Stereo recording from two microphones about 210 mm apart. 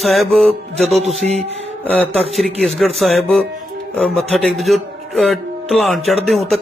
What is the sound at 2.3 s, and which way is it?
A man's voice, centre (ahead or behind).